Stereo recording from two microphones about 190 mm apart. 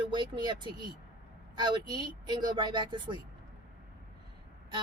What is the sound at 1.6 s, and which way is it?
A woman's voice, 20° right (ahead or behind).